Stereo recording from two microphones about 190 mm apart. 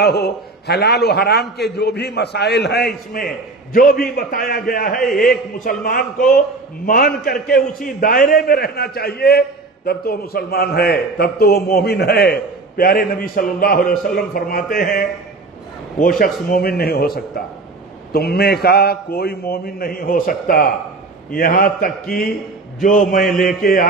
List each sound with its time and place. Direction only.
0.0 s a man's voice: 60° left (ahead or behind)